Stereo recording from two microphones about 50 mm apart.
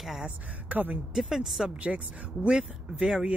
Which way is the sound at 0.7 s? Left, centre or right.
Right.